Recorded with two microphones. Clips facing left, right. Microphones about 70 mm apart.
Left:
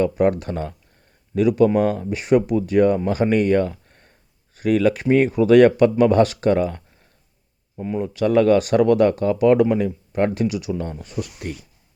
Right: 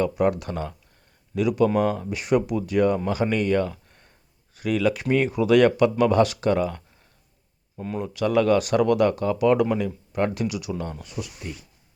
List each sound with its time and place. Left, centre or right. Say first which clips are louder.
0.0 s speech: left 4 dB; left
7.8 s speech: left 5 dB; centre
8.1 s speech: left 4 dB; left
11.2 s speech: left 6 dB; left